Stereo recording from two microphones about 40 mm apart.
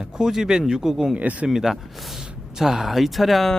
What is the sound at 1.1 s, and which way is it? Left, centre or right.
Speech, right.